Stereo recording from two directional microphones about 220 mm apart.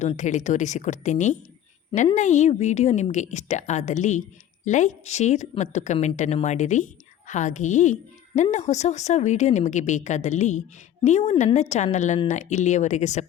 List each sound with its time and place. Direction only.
0.0 s speech: 35° left (ahead or behind)